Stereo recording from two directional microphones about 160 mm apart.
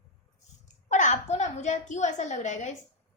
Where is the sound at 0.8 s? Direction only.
50° left (ahead or behind).